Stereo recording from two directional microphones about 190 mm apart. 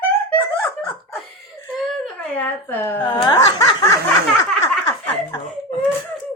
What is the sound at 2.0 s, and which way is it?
Speech, 5° left (ahead or behind).